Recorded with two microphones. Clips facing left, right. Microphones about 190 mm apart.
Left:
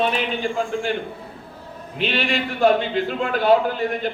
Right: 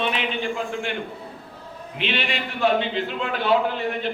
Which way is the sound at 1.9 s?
40° left (ahead or behind).